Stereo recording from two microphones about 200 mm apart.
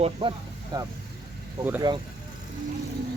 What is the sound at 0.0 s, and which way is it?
Speech, 25° right (ahead or behind).